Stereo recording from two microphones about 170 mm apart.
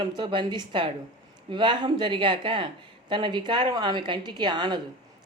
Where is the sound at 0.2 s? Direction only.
25° right (ahead or behind).